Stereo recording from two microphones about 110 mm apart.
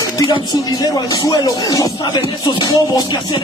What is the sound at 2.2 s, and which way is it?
Music, 50° left (ahead or behind).